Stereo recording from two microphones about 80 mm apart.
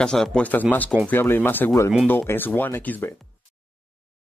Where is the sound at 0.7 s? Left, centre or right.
Centre.